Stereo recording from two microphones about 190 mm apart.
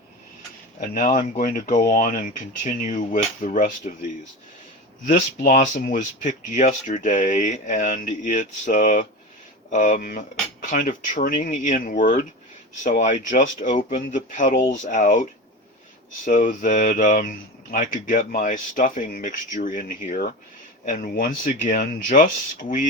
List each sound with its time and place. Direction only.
0.8 s speech: 45° left (ahead or behind)
5.0 s speech: 50° left (ahead or behind)